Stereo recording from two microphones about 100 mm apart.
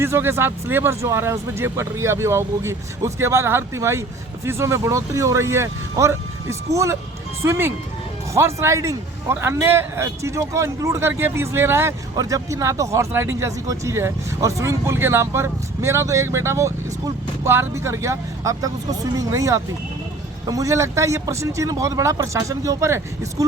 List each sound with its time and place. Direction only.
0.0 s speech: 25° right (ahead or behind)
12.1 s speech: 35° right (ahead or behind)